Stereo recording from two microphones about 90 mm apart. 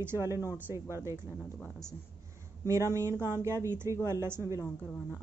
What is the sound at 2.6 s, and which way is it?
A woman's voice, 30° right (ahead or behind).